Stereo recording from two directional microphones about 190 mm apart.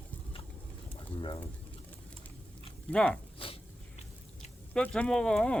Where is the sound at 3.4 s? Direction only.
30° left (ahead or behind).